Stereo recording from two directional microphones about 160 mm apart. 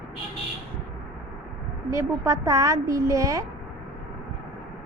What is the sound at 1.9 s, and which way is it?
A woman's voice, 15° right (ahead or behind).